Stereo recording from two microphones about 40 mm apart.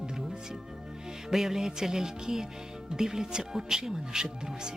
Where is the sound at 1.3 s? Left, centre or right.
Centre.